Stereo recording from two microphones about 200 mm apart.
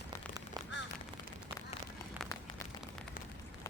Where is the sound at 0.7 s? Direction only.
60° left (ahead or behind).